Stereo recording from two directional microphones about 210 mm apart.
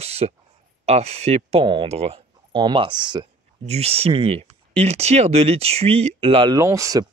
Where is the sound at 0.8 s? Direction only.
30° right (ahead or behind).